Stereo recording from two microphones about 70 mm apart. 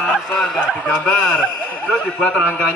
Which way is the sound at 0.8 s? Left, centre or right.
Left.